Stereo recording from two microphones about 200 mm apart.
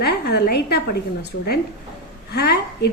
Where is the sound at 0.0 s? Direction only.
55° left (ahead or behind).